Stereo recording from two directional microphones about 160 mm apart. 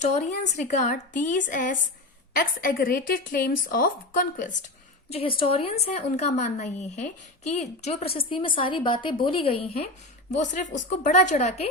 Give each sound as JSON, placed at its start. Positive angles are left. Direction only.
{"t": 0.0, "sound": "a woman's voice", "side_deg": 50}
{"t": 5.4, "sound": "a woman's voice", "side_deg": 35}
{"t": 10.3, "sound": "a woman's voice", "side_deg": 50}